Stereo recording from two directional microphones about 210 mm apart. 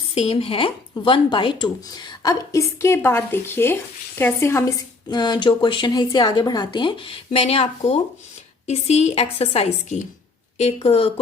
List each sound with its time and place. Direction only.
0.1 s a woman's voice: 30° left (ahead or behind)